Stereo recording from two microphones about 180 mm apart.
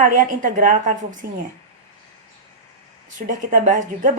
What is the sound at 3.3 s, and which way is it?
Speech, 45° right (ahead or behind).